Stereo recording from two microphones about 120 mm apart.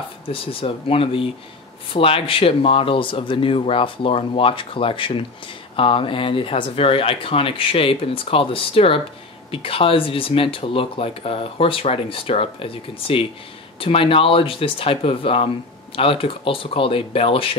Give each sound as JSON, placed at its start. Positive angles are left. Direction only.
{"t": 0.3, "sound": "speech", "side_deg": 50}